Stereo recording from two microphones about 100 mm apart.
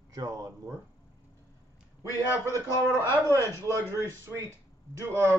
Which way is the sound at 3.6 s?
30° right (ahead or behind).